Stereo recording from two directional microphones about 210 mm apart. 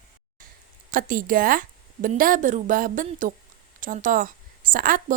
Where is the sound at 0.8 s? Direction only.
40° right (ahead or behind).